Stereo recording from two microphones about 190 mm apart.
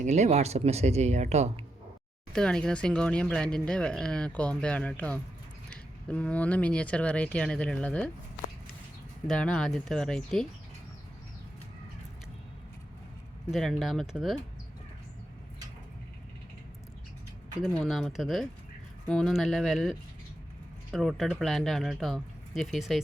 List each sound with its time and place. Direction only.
0.0 s speech: 35° right (ahead or behind)
2.3 s speech: 5° left (ahead or behind)
9.2 s speech: 5° left (ahead or behind)
13.5 s speech: centre (ahead or behind)
17.6 s speech: centre (ahead or behind)